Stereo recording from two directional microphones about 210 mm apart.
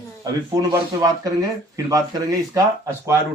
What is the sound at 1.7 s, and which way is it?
Speech, 15° right (ahead or behind).